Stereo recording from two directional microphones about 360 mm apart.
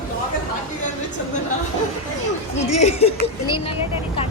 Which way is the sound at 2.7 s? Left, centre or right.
Centre.